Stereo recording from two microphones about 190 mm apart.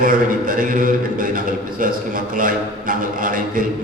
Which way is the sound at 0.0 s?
45° right (ahead or behind).